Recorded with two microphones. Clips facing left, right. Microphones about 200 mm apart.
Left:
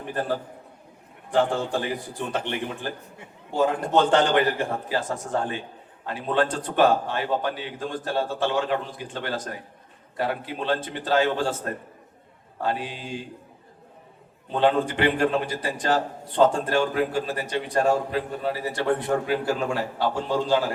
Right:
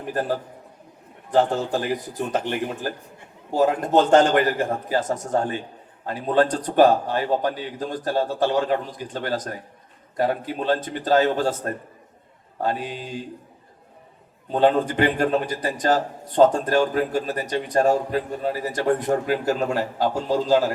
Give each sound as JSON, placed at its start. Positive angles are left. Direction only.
{"t": 1.3, "sound": "a man's voice", "side_deg": -40}
{"t": 14.5, "sound": "a man's voice", "side_deg": -45}